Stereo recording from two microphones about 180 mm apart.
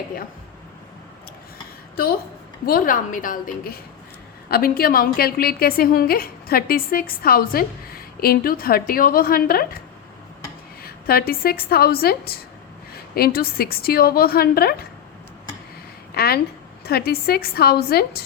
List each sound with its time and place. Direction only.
2.6 s a woman's voice: 50° left (ahead or behind)
10.8 s a woman's voice: 55° left (ahead or behind)
16.1 s a woman's voice: 60° left (ahead or behind)